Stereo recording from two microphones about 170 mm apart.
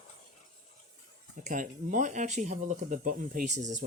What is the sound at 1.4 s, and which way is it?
Speech, 50° right (ahead or behind).